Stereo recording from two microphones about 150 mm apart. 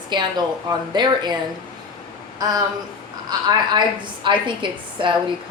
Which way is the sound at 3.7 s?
30° right (ahead or behind).